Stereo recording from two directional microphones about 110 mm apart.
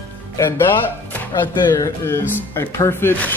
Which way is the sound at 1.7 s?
25° left (ahead or behind).